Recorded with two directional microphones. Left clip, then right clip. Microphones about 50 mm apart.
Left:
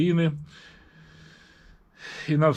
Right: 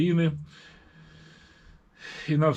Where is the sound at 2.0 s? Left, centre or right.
Left.